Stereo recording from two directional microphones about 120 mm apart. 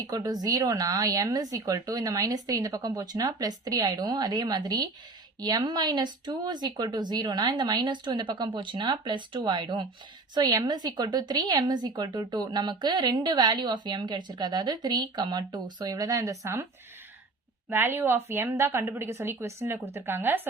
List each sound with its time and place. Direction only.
0.0 s a woman's voice: 30° right (ahead or behind)
17.7 s a woman's voice: 15° right (ahead or behind)